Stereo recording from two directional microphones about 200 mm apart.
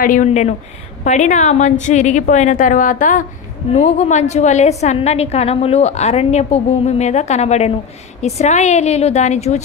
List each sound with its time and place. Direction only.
0.0 s a woman's voice: 40° left (ahead or behind)